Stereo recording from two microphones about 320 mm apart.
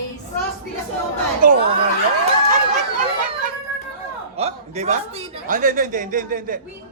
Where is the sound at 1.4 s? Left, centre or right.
Right.